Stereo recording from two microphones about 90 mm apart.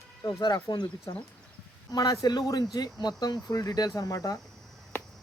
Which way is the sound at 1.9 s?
50° left (ahead or behind).